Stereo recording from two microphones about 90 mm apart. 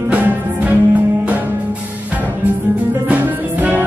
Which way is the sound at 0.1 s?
20° right (ahead or behind).